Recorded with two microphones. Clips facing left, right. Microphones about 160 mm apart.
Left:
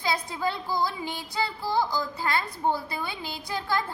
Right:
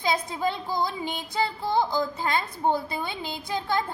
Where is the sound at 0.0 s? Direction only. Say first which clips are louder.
Right 2 dB; 20° right (ahead or behind).